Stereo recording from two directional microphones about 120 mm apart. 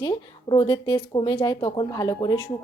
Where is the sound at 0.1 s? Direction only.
40° left (ahead or behind).